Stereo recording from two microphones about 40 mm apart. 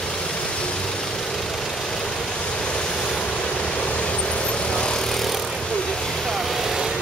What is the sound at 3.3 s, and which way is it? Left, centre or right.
Vehicle, left.